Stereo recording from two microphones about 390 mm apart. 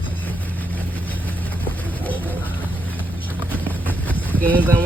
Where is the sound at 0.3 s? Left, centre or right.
Centre.